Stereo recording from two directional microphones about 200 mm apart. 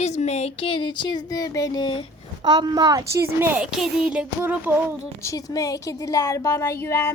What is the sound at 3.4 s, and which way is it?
Speech, 10° right (ahead or behind).